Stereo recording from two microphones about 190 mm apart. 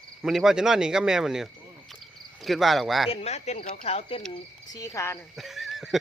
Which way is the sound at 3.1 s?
35° left (ahead or behind).